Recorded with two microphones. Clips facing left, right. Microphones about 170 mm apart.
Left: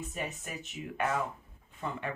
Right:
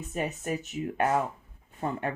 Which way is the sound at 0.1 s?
40° right (ahead or behind).